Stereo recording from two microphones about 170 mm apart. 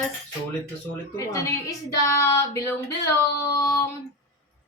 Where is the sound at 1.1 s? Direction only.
15° left (ahead or behind).